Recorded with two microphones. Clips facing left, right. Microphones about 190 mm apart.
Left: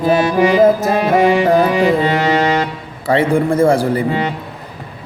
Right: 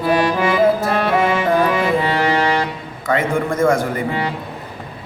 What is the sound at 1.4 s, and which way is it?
Music, 35° left (ahead or behind).